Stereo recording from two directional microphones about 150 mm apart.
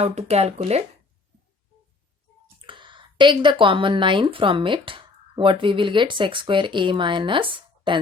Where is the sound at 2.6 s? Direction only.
30° right (ahead or behind).